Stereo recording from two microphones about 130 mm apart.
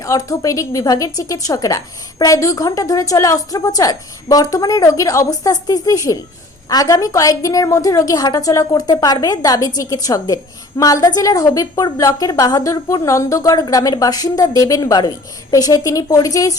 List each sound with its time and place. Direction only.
0.0 s a woman's voice: 25° left (ahead or behind)